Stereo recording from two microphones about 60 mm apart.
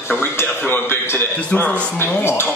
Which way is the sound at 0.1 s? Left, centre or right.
Left.